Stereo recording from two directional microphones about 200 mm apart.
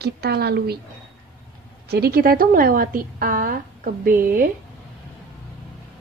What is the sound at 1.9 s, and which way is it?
A woman's voice, 50° right (ahead or behind).